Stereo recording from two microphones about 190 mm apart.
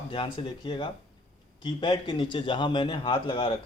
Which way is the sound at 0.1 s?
25° left (ahead or behind).